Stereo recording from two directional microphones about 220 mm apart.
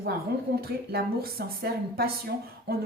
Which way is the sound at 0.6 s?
45° right (ahead or behind).